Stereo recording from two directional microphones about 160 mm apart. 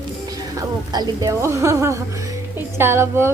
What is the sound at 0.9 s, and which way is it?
Stir, 20° right (ahead or behind).